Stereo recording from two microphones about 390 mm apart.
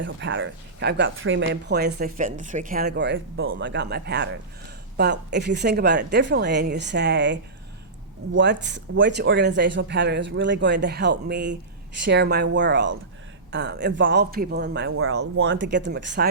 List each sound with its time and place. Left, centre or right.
0.0 s speech: right